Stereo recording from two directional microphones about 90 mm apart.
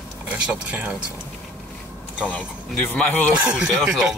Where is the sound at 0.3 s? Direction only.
15° right (ahead or behind).